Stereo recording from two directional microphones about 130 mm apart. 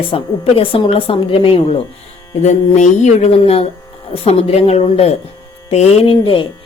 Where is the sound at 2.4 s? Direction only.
60° left (ahead or behind).